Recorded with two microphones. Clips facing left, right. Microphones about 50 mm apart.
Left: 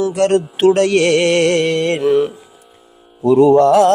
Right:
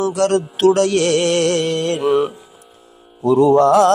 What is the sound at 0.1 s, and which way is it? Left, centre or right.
Music, left.